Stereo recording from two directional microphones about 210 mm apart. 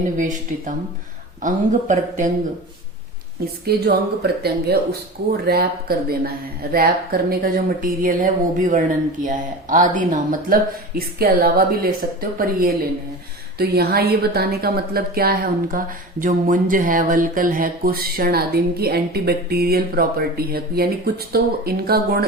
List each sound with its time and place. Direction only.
0.2 s speech: 40° right (ahead or behind)
3.7 s speech: 50° right (ahead or behind)